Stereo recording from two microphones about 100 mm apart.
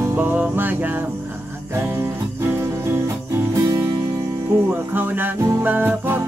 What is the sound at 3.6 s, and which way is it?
Music, 30° right (ahead or behind).